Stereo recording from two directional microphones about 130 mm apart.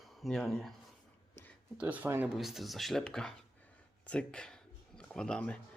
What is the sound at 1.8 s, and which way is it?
Speech, 10° right (ahead or behind).